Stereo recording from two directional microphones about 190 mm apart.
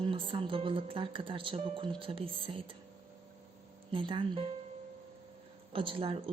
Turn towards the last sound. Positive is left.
turn(degrees=-30)  # may be behind; listen again after turning